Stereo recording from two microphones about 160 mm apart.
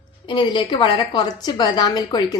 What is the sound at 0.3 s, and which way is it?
A woman's voice, 30° left (ahead or behind).